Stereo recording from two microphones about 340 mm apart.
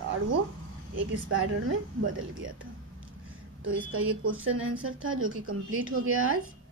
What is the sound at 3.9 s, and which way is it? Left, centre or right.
A woman's voice, right.